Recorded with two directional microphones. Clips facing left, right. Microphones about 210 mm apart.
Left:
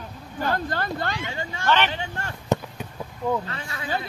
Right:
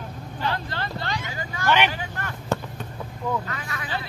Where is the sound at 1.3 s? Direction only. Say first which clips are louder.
Left 1 dB; 25° left (ahead or behind).